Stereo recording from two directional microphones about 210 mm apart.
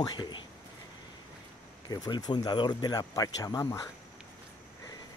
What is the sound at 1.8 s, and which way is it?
Speech, 20° left (ahead or behind).